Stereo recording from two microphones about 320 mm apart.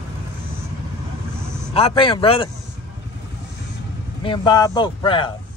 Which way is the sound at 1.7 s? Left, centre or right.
Centre.